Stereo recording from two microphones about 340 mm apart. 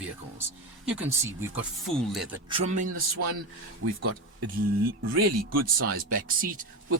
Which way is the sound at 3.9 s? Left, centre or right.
Right.